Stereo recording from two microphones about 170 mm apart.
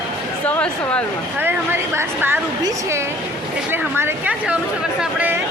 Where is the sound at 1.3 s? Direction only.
15° right (ahead or behind).